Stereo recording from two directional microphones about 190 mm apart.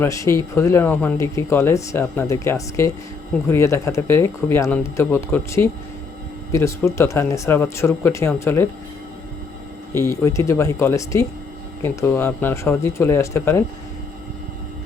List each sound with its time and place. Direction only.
0.0 s speech: 15° left (ahead or behind)
9.9 s speech: 15° left (ahead or behind)